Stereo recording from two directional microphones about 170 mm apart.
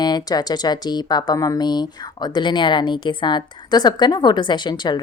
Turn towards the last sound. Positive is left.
turn(degrees=25)  # may be behind; listen again after turning